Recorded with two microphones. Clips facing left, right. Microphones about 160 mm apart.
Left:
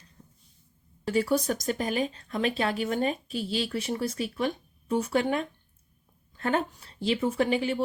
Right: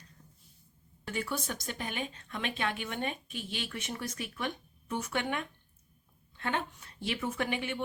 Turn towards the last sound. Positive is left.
turn(degrees=35)  # may be behind; listen again after turning